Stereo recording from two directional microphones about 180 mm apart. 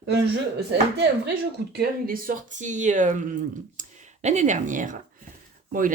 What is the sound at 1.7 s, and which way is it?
Speech, 55° right (ahead or behind).